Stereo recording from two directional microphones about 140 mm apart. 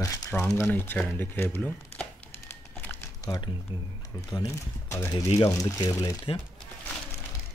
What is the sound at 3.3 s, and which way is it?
Speech, 30° left (ahead or behind).